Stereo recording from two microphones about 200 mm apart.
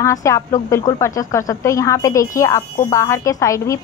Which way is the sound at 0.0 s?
15° left (ahead or behind).